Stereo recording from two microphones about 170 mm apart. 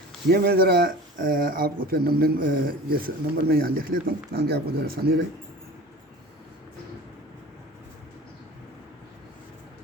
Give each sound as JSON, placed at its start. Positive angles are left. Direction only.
{"t": 0.3, "sound": "speech", "side_deg": -70}